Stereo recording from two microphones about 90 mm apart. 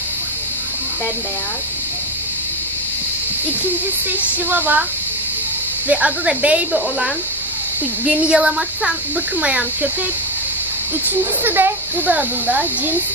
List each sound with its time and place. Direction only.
4.2 s speech: 20° right (ahead or behind)
5.9 s speech: 15° right (ahead or behind)
11.4 s speech: 25° right (ahead or behind)